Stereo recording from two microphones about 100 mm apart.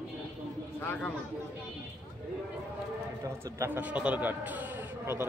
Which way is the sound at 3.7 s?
15° right (ahead or behind).